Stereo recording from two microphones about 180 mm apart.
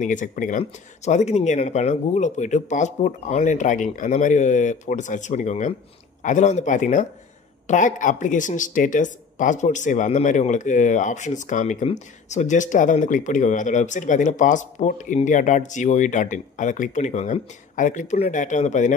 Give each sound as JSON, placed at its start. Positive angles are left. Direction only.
{"t": 0.0, "sound": "speech", "side_deg": 45}